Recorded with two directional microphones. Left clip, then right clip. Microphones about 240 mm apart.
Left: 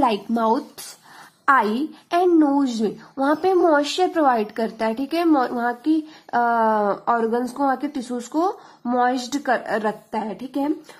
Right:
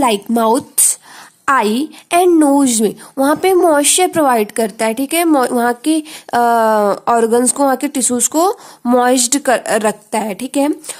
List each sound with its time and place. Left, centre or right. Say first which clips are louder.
0.0 s a woman's voice: right 6 dB; right